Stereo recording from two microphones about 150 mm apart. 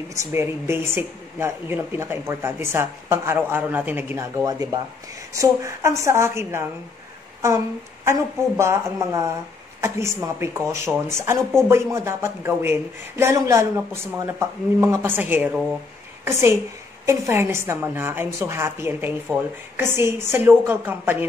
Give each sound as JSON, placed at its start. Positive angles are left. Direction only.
{"t": 0.1, "sound": "a woman's voice", "side_deg": -15}